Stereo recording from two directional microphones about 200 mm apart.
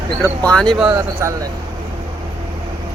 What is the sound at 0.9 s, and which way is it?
Speech, 15° right (ahead or behind).